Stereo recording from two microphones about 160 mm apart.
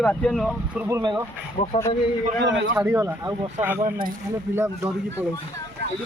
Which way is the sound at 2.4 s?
90° right.